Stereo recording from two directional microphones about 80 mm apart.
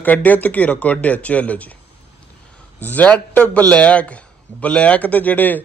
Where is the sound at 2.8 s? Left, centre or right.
Left.